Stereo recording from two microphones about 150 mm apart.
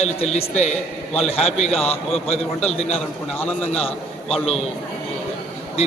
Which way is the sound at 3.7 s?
40° left (ahead or behind).